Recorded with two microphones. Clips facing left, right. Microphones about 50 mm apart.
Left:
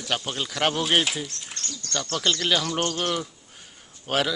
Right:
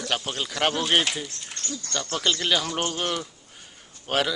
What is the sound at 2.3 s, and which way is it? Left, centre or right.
Speech, centre.